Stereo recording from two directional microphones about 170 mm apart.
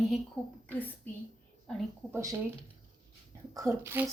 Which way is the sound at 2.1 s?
20° right (ahead or behind).